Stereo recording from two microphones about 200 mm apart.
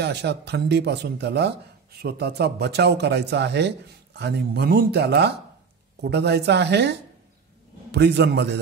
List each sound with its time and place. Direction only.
0.0 s speech: 55° right (ahead or behind)